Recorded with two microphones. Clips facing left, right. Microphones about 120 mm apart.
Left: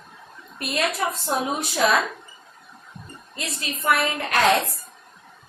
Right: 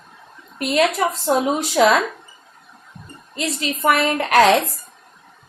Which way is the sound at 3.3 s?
90° right.